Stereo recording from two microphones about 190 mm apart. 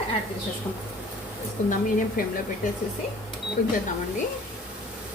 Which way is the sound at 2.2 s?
50° left (ahead or behind).